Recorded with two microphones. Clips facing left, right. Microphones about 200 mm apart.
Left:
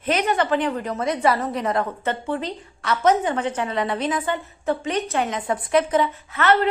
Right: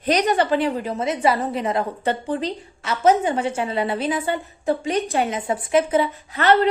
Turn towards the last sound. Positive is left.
turn(degrees=-35)  # may be behind; listen again after turning